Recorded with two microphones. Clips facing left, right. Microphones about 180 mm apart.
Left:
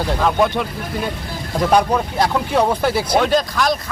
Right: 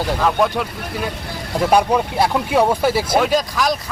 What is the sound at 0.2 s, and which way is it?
Speech, centre (ahead or behind).